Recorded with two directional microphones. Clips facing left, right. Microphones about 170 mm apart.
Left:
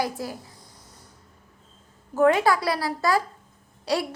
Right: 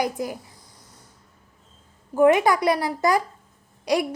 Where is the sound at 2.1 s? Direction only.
15° right (ahead or behind).